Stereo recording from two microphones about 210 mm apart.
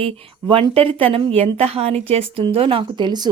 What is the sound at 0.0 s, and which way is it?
A woman's voice, 25° right (ahead or behind).